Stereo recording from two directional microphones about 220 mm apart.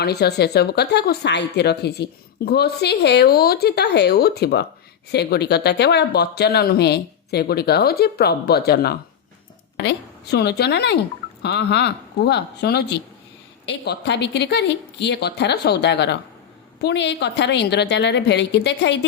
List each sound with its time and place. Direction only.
0.0 s speech: 45° left (ahead or behind)